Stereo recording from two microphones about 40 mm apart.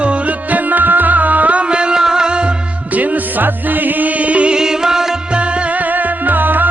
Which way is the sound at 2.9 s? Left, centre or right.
Right.